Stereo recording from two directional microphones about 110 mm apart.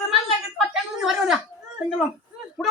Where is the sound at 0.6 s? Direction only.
5° right (ahead or behind).